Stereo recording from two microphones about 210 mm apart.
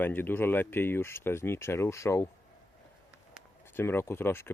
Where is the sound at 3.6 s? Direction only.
10° left (ahead or behind).